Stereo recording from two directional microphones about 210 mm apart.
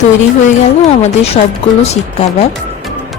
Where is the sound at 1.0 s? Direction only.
30° left (ahead or behind).